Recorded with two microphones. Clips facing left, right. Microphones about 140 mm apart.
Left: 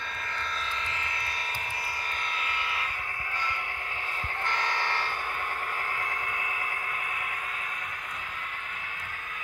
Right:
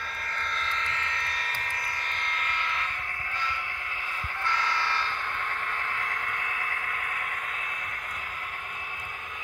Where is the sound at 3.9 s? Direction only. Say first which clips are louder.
Left 1 dB; 50° left (ahead or behind).